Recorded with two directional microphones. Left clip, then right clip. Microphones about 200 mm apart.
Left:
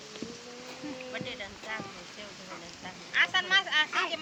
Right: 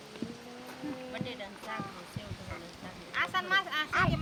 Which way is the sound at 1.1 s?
45° right (ahead or behind).